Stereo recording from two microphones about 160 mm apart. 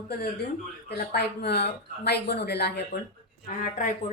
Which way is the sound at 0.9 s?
85° left.